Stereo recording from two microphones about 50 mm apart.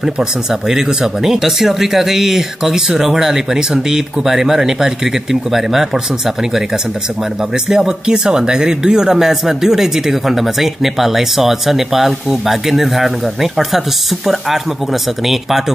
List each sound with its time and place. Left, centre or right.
0.0 s speech: centre
7.7 s speech: centre